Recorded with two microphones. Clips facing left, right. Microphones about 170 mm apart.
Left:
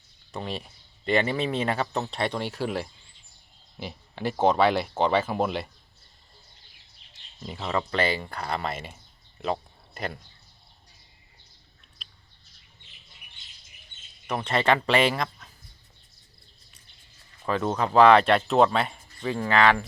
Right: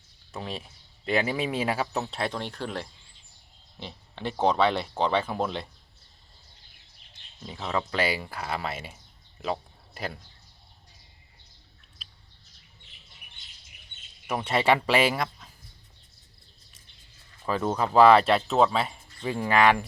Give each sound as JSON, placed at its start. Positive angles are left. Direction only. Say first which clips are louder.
{"t": 0.3, "sound": "speech", "louder": "left 2 dB", "side_deg": 0}
{"t": 7.4, "sound": "speech", "louder": "left 1 dB", "side_deg": 5}
{"t": 9.4, "sound": "a sound", "louder": "left 2 dB", "side_deg": 0}
{"t": 14.3, "sound": "speech", "louder": "even", "side_deg": -10}
{"t": 17.4, "sound": "speech", "louder": "left 1 dB", "side_deg": -5}
{"t": 19.2, "sound": "speech", "louder": "even", "side_deg": -10}